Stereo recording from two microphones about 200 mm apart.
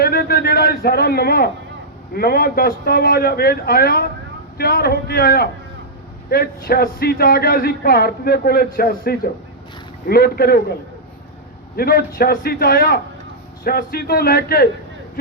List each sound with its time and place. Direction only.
0.0 s a sound: 50° left (ahead or behind)
2.1 s speech: 50° left (ahead or behind)
11.8 s speech: 50° left (ahead or behind)